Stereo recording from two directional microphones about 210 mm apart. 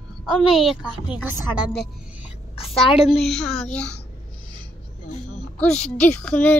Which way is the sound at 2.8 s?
30° left (ahead or behind).